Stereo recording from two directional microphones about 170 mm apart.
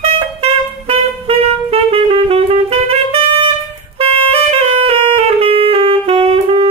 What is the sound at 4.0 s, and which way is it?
Saxophone, 35° right (ahead or behind).